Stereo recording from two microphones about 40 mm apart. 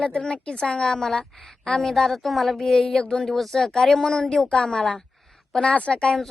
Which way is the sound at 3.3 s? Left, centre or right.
Centre.